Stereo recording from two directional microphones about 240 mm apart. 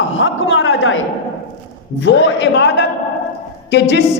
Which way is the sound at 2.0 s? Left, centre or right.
Left.